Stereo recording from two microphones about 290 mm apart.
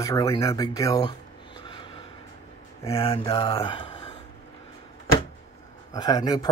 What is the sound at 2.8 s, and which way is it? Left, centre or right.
Speech, centre.